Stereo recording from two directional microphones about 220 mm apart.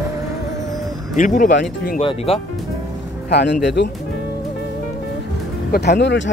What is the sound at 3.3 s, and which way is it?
Speech, 50° left (ahead or behind).